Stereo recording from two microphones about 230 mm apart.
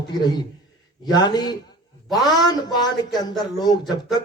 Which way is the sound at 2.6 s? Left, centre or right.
Centre.